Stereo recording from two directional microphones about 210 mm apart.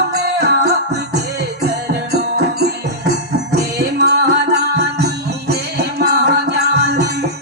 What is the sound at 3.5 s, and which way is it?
Music, 50° right (ahead or behind).